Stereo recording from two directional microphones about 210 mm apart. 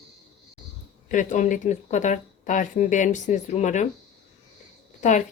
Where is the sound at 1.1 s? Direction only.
35° left (ahead or behind).